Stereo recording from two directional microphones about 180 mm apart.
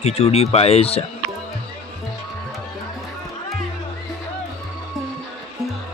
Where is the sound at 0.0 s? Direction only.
35° left (ahead or behind).